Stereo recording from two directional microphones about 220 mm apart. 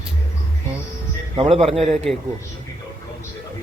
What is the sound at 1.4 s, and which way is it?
Speech, 25° right (ahead or behind).